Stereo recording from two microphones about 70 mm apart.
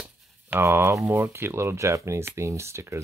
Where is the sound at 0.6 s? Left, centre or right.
Right.